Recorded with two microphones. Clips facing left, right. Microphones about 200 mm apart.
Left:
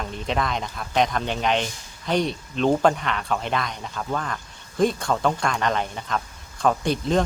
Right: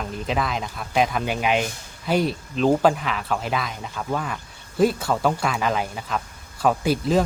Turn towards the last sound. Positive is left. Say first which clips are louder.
# right 2 dB
turn(degrees=-5)  # may be behind; listen again after turning